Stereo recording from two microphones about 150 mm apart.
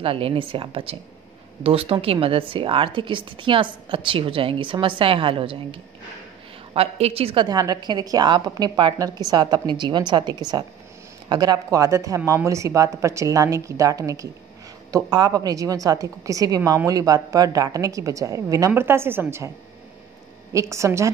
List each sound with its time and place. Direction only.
0.0 s speech: 35° right (ahead or behind)
7.4 s a woman's voice: 25° right (ahead or behind)
20.5 s a woman's voice: 20° right (ahead or behind)